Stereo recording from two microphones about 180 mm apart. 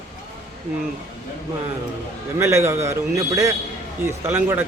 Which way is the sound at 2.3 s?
15° right (ahead or behind).